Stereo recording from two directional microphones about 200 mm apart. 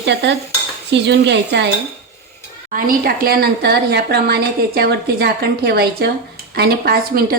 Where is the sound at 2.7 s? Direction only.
45° right (ahead or behind).